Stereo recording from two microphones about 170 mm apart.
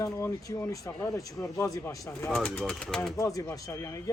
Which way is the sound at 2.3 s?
5° left (ahead or behind).